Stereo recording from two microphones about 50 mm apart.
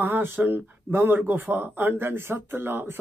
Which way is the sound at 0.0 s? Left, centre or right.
Right.